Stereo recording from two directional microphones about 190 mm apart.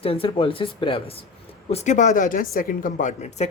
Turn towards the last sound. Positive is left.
turn(degrees=40)  # may be behind; listen again after turning